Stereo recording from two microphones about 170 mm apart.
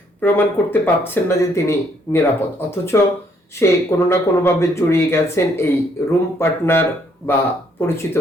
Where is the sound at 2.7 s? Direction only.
15° left (ahead or behind).